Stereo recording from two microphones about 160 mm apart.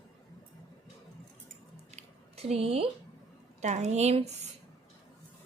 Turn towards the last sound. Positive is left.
turn(degrees=-45)  # may be behind; listen again after turning